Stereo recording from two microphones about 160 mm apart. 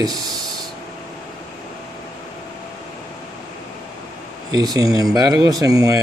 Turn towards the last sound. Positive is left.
turn(degrees=-20)  # may be behind; listen again after turning